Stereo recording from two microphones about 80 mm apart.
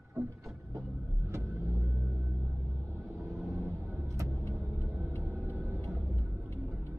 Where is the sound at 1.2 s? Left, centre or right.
Right.